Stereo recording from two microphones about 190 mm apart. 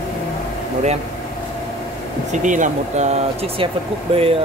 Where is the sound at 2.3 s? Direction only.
40° right (ahead or behind).